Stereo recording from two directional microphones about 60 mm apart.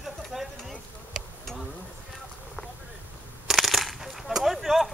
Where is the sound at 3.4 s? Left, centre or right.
Centre.